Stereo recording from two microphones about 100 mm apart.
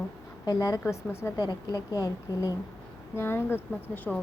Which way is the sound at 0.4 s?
35° left (ahead or behind).